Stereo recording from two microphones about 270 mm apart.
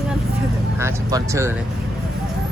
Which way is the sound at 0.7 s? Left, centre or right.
Centre.